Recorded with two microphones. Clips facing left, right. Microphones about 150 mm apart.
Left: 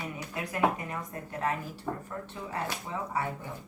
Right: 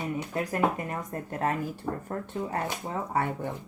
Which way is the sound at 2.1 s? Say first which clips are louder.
Right 4 dB; 55° right (ahead or behind).